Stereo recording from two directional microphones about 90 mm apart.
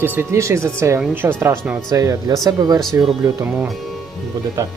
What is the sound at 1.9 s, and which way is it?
Speech, 40° right (ahead or behind).